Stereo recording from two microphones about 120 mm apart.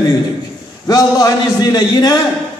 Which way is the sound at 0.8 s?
30° left (ahead or behind).